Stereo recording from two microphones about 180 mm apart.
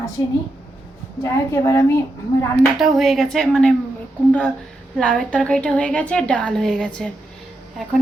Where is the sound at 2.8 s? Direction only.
Centre (ahead or behind).